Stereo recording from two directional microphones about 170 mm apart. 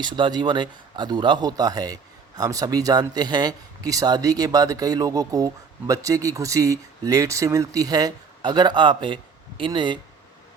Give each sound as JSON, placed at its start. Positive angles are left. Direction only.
{"t": 0.0, "sound": "speech", "side_deg": -25}